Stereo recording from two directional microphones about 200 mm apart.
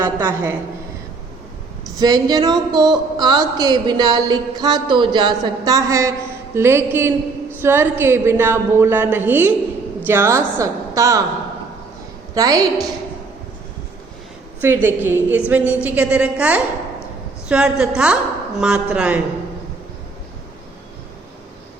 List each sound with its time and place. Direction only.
0.0 s a woman's voice: 10° right (ahead or behind)
2.0 s a woman's voice: 20° right (ahead or behind)
12.3 s a woman's voice: 20° right (ahead or behind)
14.6 s a woman's voice: 10° right (ahead or behind)